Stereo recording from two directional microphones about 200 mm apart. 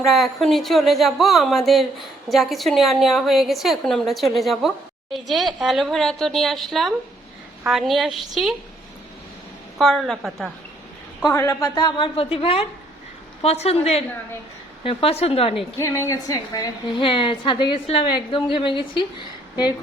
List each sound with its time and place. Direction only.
0.0 s speech: centre (ahead or behind)
9.7 s speech: centre (ahead or behind)
11.3 s a woman's voice: 15° left (ahead or behind)
15.8 s a woman's voice: 15° left (ahead or behind)